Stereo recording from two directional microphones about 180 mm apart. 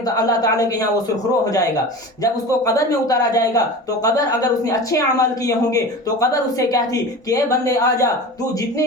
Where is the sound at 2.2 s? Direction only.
20° left (ahead or behind).